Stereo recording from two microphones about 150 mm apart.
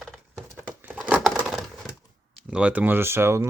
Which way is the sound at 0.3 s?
15° right (ahead or behind).